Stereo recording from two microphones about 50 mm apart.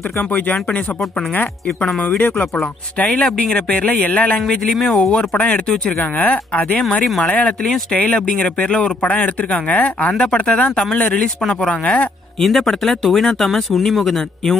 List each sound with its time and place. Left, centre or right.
2.1 s speech: left
3.1 s speech: centre
4.5 s speech: centre
5.0 s speech: left
11.8 s speech: left
12.4 s speech: centre